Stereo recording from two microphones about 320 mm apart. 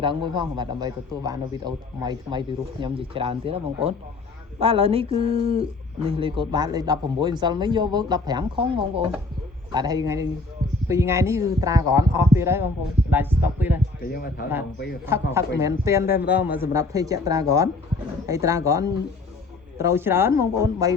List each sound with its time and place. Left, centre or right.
0.0 s speech: centre
14.0 s a man's voice: left
15.0 s speech: centre